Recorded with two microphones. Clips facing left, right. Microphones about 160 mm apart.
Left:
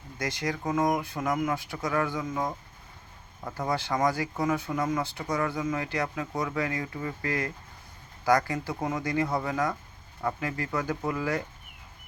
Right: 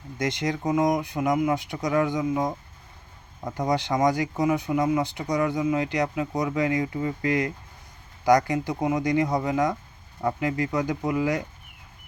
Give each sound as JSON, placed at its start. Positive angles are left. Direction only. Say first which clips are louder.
{"t": 0.2, "sound": "speech", "louder": "right 5 dB", "side_deg": -20}